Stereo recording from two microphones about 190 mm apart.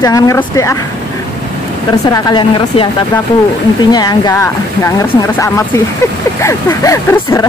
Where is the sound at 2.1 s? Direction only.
25° left (ahead or behind).